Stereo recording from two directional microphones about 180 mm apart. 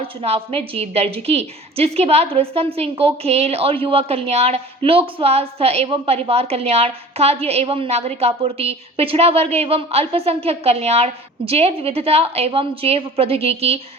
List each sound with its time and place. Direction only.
0.0 s a woman's voice: 30° right (ahead or behind)